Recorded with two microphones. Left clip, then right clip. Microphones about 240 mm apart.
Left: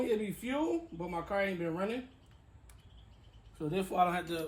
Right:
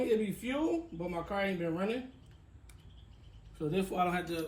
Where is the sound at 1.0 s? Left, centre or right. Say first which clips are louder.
Left 1 dB; centre.